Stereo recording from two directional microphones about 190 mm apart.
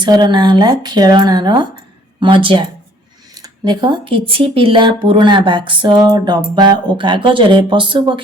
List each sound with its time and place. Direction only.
0.0 s speech: 25° right (ahead or behind)